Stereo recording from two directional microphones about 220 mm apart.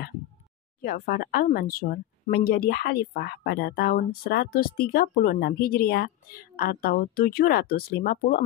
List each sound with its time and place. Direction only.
0.7 s speech: 40° left (ahead or behind)